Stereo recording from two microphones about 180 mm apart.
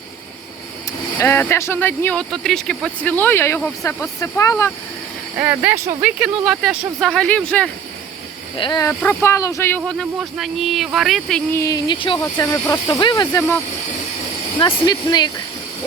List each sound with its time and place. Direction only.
1.2 s speech: 15° left (ahead or behind)
5.4 s speech: 10° right (ahead or behind); by 7.7 s 5° left (ahead or behind)
8.5 s speech: 25° left (ahead or behind); by 11.4 s centre (ahead or behind)
11.5 s speech: 20° left (ahead or behind)
12.2 s speech: 15° left (ahead or behind)
14.6 s speech: 25° left (ahead or behind)